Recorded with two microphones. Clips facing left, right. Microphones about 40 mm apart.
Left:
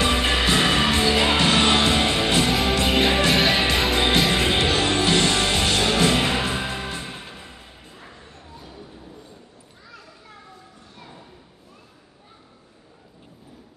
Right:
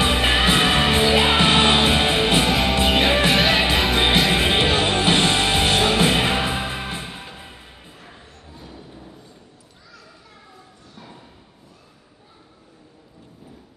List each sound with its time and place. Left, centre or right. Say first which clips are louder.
0.0 s music: right 2 dB; right
2.4 s music: right 2 dB; centre
4.3 s music: right 2 dB; right
7.1 s music: right 1 dB; centre
7.4 s music: right 1 dB; centre
8.5 s music: right 2 dB; centre